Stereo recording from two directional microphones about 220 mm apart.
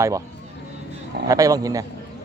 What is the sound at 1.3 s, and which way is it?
Speech, 15° right (ahead or behind).